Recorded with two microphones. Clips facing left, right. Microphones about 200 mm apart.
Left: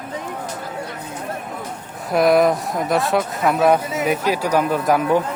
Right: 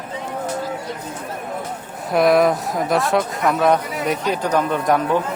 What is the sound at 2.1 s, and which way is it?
Speech, centre (ahead or behind).